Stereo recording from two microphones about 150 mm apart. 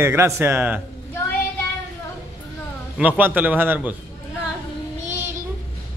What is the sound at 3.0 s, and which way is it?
Speech, 10° right (ahead or behind).